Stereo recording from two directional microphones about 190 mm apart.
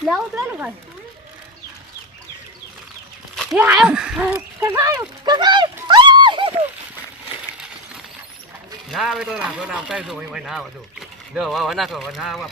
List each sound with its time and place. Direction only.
0.0 s speech: 5° right (ahead or behind)
3.6 s speech: 5° right (ahead or behind); by 5.6 s 25° right (ahead or behind)
5.9 s a sound: 25° right (ahead or behind)
8.9 s speech: centre (ahead or behind)